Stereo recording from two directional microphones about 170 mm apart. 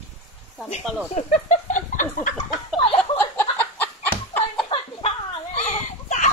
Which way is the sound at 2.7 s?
35° left (ahead or behind).